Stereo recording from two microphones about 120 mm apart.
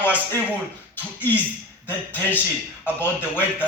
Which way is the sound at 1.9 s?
15° left (ahead or behind).